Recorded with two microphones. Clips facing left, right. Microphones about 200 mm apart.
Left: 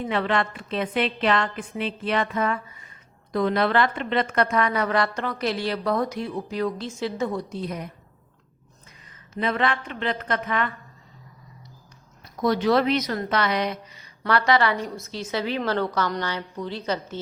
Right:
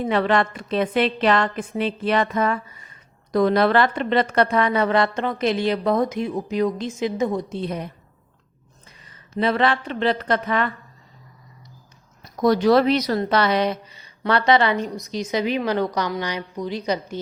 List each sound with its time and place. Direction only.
0.1 s a woman's voice: 40° right (ahead or behind)
9.4 s a woman's voice: 30° right (ahead or behind)
12.4 s a woman's voice: 40° right (ahead or behind); by 17.2 s 15° right (ahead or behind)